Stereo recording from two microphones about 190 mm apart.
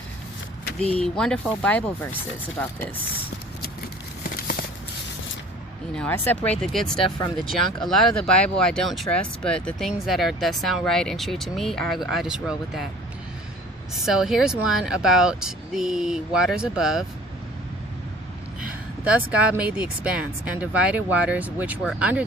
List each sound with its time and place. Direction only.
0.8 s speech: 30° right (ahead or behind)
1.0 s speech: 5° left (ahead or behind)
5.9 s speech: 5° left (ahead or behind)
7.0 s speech: 20° left (ahead or behind)
7.8 s speech: centre (ahead or behind)
14.0 s speech: centre (ahead or behind)
18.7 s speech: 5° right (ahead or behind)